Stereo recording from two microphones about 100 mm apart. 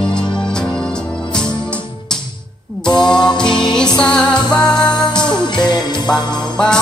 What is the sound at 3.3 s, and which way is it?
Music, 5° left (ahead or behind).